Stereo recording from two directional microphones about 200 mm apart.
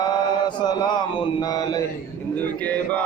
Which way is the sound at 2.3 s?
10° left (ahead or behind).